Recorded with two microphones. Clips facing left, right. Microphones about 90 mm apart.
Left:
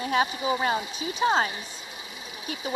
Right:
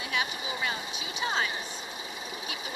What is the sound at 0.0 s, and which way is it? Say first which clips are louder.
Speech: left 8 dB; 40° left (ahead or behind).